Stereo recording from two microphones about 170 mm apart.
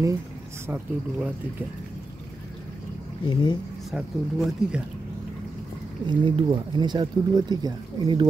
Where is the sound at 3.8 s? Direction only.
Centre (ahead or behind).